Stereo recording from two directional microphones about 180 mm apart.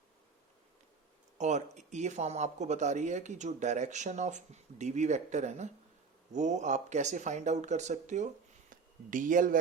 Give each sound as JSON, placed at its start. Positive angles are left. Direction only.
{"t": 1.4, "sound": "speech", "side_deg": -40}